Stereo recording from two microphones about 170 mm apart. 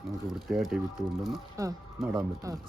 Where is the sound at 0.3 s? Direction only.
Centre (ahead or behind).